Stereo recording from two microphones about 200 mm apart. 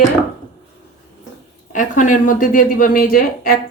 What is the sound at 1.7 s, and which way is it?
Speech, 40° left (ahead or behind).